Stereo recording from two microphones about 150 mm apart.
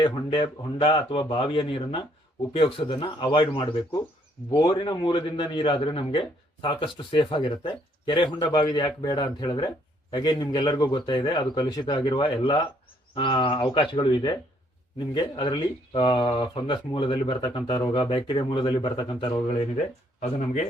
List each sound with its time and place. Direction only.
0.0 s a man's voice: 30° left (ahead or behind)
20.1 s speech: 55° left (ahead or behind)